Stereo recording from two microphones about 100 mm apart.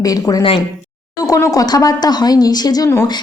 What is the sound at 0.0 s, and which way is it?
A woman's voice, 35° left (ahead or behind).